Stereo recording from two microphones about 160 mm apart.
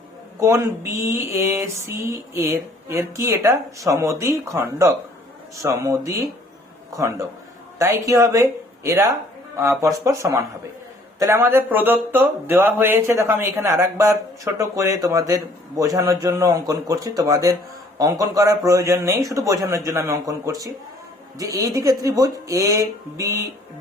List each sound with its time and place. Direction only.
0.3 s speech: 20° right (ahead or behind)